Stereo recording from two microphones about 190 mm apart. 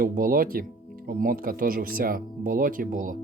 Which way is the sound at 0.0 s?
45° right (ahead or behind).